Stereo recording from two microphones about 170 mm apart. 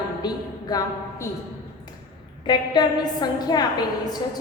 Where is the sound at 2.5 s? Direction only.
25° left (ahead or behind).